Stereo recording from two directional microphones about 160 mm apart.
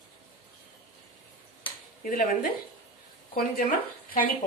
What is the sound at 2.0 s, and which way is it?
Speech, 60° left (ahead or behind).